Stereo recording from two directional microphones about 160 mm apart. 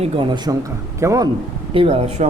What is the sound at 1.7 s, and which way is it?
Speech, 35° right (ahead or behind).